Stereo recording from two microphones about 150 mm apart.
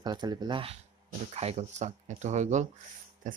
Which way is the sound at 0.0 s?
30° right (ahead or behind).